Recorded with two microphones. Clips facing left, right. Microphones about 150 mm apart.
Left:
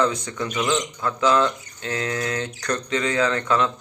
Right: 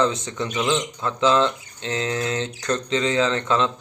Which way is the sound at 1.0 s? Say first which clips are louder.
Right 1 dB; 20° right (ahead or behind).